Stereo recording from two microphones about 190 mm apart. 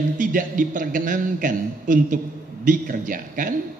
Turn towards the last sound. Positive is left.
turn(degrees=-45)  # may be behind; listen again after turning